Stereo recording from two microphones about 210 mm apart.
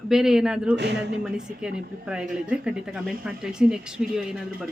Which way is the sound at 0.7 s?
55° right (ahead or behind).